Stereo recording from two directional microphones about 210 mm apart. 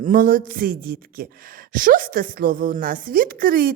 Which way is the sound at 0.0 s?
40° right (ahead or behind).